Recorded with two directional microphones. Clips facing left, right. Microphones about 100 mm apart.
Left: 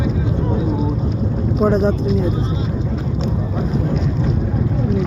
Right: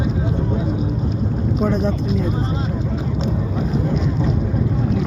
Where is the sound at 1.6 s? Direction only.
40° left (ahead or behind).